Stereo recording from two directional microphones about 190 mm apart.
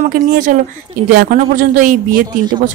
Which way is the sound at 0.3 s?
45° right (ahead or behind).